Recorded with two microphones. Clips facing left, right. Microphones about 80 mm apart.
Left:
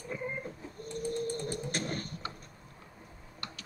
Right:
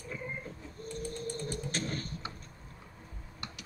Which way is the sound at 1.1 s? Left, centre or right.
Left.